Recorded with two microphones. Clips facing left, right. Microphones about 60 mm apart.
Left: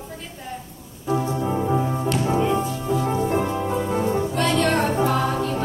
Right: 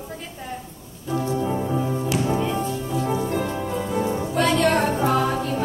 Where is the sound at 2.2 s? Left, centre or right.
Centre.